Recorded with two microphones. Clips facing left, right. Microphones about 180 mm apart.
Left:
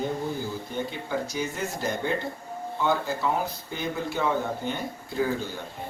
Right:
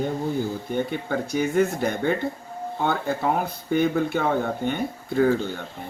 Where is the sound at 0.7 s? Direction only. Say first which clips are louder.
Right 5 dB; 60° right (ahead or behind).